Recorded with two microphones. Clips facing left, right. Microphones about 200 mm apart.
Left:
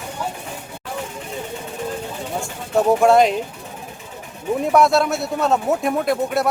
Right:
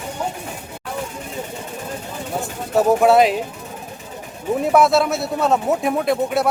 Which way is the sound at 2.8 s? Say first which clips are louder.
Even; 5° right (ahead or behind).